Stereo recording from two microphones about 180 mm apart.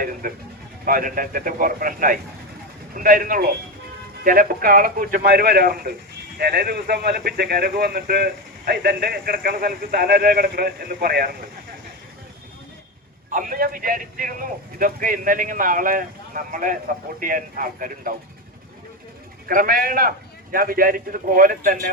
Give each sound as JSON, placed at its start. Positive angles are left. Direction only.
{"t": 0.2, "sound": "a man's voice", "side_deg": -50}
{"t": 13.3, "sound": "a man's voice", "side_deg": -50}
{"t": 19.5, "sound": "a man's voice", "side_deg": -50}